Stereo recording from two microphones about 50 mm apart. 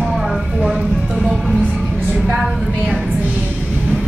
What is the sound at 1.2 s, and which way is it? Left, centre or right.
Music, centre.